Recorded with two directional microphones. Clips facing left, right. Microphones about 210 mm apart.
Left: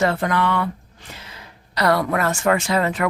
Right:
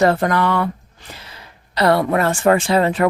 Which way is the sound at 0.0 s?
40° right (ahead or behind).